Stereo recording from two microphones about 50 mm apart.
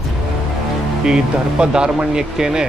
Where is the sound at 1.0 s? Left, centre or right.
Centre.